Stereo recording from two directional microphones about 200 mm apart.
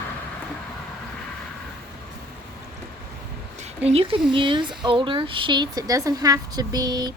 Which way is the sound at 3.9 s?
25° right (ahead or behind).